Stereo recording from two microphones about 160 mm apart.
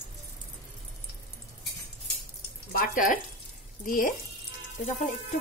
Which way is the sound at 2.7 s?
60° left (ahead or behind).